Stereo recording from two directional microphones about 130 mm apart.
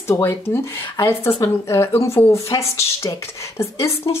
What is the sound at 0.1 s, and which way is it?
Speech, 15° left (ahead or behind).